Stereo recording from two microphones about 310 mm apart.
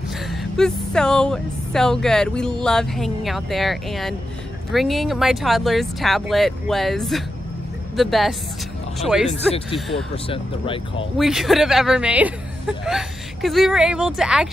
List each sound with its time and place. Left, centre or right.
0.3 s speech: centre
9.3 s speech: centre
9.8 s speech: centre
10.1 s speech: centre
11.1 s speech: centre